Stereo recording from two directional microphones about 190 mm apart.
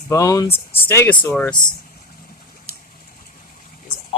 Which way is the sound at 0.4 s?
30° left (ahead or behind).